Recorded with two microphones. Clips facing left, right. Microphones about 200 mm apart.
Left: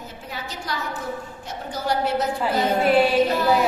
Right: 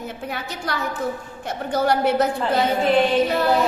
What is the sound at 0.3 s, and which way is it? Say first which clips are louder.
A woman's voice: right 1 dB; 60° right (ahead or behind).